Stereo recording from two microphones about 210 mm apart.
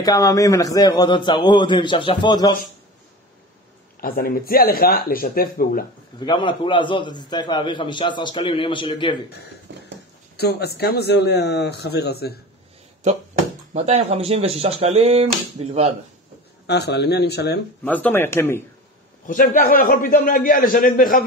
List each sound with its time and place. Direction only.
0.0 s a man's voice: 15° left (ahead or behind)
4.0 s a man's voice: 45° left (ahead or behind)
6.1 s a man's voice: 20° left (ahead or behind)
9.3 s a man's voice: 50° left (ahead or behind)
13.7 s speech: 30° right (ahead or behind)
16.6 s a man's voice: 55° left (ahead or behind)
17.8 s speech: 10° left (ahead or behind)
19.2 s a man's voice: 40° left (ahead or behind)